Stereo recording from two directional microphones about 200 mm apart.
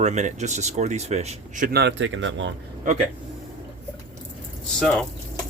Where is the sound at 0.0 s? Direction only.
35° right (ahead or behind); by 2.5 s 65° right (ahead or behind).